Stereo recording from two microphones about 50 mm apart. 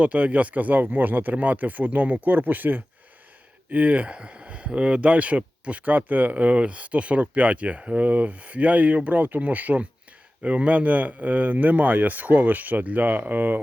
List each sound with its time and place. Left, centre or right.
0.0 s speech: right